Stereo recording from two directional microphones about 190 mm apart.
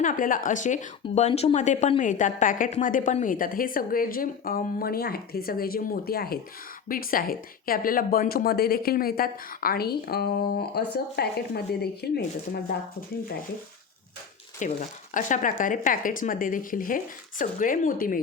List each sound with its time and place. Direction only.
0.0 s speech: 45° left (ahead or behind)
14.6 s speech: 40° left (ahead or behind)